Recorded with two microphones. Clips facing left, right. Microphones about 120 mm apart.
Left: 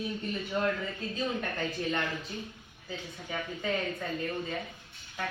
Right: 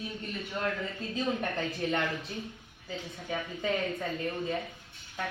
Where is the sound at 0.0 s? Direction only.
Centre (ahead or behind).